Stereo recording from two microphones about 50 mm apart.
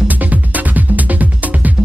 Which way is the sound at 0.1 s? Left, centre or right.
Right.